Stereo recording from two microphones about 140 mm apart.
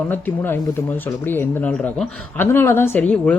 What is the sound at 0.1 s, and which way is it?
Speech, 15° left (ahead or behind).